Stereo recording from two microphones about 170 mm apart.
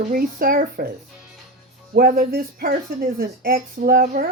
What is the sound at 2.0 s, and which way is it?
Speech, 60° right (ahead or behind).